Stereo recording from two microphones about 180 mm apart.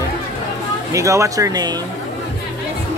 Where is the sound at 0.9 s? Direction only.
15° right (ahead or behind).